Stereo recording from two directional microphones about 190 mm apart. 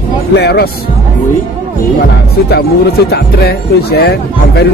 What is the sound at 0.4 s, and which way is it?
Speech, 60° left (ahead or behind).